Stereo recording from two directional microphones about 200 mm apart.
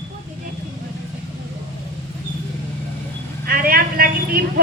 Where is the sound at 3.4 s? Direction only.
45° right (ahead or behind).